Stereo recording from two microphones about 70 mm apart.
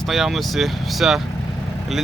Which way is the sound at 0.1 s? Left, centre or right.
Centre.